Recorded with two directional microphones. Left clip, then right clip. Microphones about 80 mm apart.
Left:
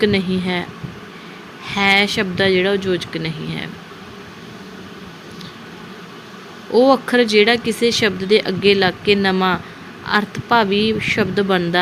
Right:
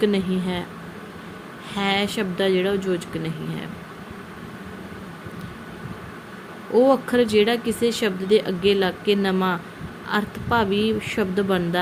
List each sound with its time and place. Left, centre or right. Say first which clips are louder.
0.0 s speech: left 5 dB; left
1.6 s speech: left 8 dB; left
6.7 s speech: left 4 dB; left